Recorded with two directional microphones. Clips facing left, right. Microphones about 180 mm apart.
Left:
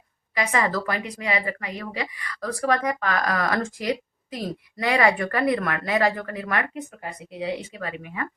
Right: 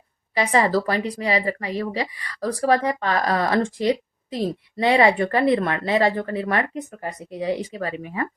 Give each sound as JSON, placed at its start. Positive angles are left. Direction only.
{"t": 0.3, "sound": "a woman's voice", "side_deg": -30}